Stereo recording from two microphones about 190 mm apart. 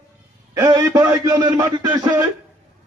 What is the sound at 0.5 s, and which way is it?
A man's voice, 20° right (ahead or behind).